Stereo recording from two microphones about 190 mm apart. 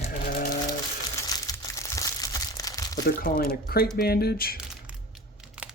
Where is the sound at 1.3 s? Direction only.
20° left (ahead or behind).